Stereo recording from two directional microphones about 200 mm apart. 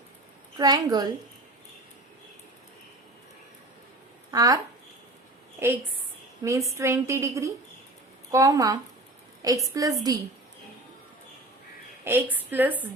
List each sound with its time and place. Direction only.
0.6 s a woman's voice: 20° right (ahead or behind)
4.3 s speech: 20° right (ahead or behind)
6.4 s a woman's voice: 15° right (ahead or behind)
12.0 s a woman's voice: 10° right (ahead or behind)